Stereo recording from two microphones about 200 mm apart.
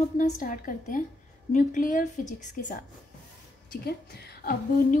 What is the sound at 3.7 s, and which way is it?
A woman's voice, 50° left (ahead or behind).